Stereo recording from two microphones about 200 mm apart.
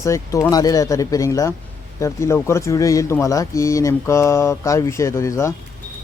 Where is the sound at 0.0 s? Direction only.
15° left (ahead or behind).